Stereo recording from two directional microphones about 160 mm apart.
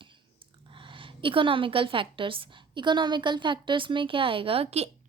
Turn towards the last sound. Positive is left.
turn(degrees=-40)  # may be behind; listen again after turning